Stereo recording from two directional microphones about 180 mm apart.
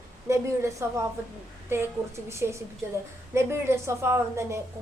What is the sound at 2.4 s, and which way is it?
A woman's voice, 15° right (ahead or behind).